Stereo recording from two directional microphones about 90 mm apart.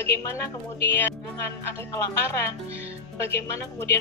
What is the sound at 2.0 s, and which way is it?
Speech, 35° left (ahead or behind).